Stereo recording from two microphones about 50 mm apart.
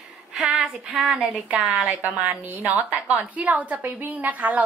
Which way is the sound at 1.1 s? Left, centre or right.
Right.